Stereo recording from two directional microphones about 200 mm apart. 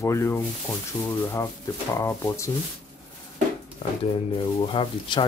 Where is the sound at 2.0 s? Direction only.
15° left (ahead or behind).